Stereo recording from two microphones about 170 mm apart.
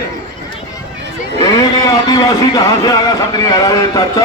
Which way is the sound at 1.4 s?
20° left (ahead or behind).